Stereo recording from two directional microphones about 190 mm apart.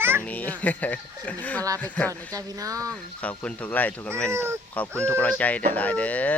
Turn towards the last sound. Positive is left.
turn(degrees=10)  # may be behind; listen again after turning